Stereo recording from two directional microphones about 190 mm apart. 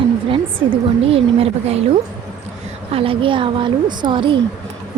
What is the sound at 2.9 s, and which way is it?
A woman's voice, 30° right (ahead or behind).